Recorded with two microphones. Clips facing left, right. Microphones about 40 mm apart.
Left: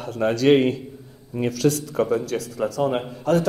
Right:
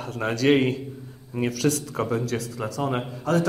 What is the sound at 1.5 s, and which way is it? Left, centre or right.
A man's voice, right.